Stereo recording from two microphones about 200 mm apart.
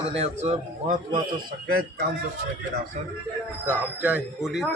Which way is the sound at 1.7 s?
50° right (ahead or behind).